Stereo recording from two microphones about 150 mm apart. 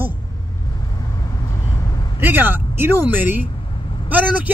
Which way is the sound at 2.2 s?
15° right (ahead or behind).